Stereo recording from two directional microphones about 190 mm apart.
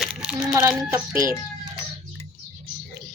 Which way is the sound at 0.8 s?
15° right (ahead or behind).